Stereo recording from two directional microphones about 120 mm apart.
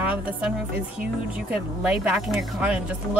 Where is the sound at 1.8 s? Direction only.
10° right (ahead or behind).